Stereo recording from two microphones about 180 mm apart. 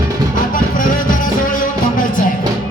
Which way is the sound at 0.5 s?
50° left (ahead or behind).